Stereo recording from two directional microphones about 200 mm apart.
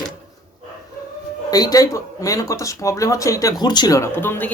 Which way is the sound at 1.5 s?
20° left (ahead or behind).